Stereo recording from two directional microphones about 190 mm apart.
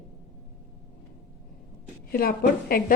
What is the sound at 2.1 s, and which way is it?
Speech, 50° left (ahead or behind).